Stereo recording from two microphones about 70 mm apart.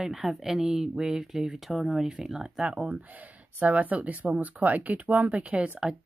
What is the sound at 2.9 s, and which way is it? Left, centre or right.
Speech, right.